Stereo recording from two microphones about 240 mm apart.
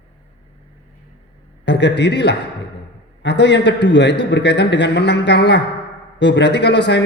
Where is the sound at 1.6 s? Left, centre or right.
Left.